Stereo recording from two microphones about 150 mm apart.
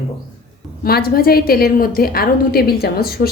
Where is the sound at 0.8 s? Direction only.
85° left.